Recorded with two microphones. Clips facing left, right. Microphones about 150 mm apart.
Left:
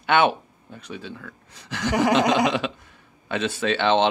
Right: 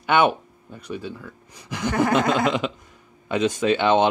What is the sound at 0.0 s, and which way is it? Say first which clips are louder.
Speech: right 1 dB; 10° right (ahead or behind).